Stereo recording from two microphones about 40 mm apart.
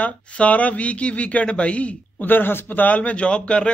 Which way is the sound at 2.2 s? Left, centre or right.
Left.